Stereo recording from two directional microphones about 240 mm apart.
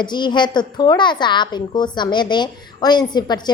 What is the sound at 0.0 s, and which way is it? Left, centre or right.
A woman's voice, centre.